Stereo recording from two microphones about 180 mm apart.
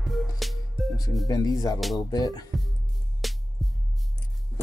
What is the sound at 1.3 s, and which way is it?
Speech, 20° left (ahead or behind).